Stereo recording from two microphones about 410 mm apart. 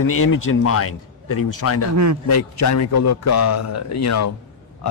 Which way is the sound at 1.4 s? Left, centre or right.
Left.